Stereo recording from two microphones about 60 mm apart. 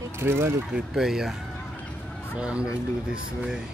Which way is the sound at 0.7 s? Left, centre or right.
Centre.